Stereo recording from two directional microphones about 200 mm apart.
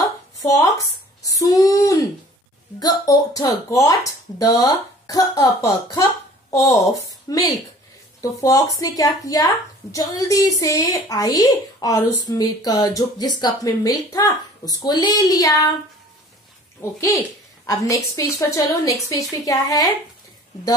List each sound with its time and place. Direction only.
0.4 s a woman's voice: 15° left (ahead or behind)
16.8 s a woman's voice: 10° left (ahead or behind)